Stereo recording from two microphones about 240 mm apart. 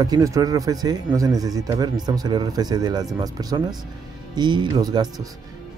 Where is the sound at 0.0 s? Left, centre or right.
Centre.